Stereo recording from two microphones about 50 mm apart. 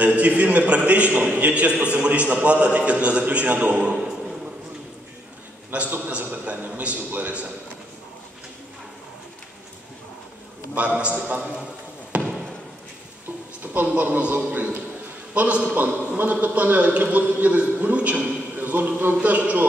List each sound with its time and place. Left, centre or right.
0.0 s a man's voice: right
5.9 s a man's voice: right
10.7 s a man's voice: right
12.1 s basketball bounce: right
13.7 s a man's voice: right